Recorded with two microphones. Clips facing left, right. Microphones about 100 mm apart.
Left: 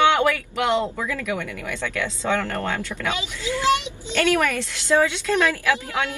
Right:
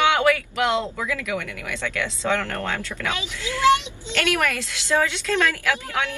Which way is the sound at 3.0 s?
20° left (ahead or behind).